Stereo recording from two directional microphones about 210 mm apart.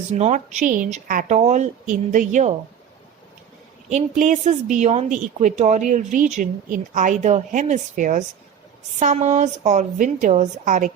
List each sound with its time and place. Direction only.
0.1 s a woman's voice: 35° right (ahead or behind)
3.8 s a woman's voice: 35° right (ahead or behind)